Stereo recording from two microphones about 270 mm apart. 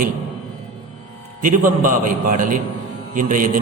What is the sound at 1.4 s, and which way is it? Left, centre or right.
A man's voice, right.